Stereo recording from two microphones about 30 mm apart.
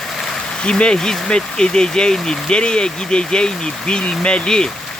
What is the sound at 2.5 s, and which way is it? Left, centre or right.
Speech, left.